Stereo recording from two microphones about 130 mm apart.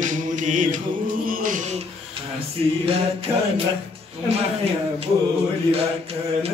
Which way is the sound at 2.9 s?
45° right (ahead or behind).